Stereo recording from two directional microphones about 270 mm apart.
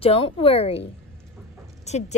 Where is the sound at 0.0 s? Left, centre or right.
Left.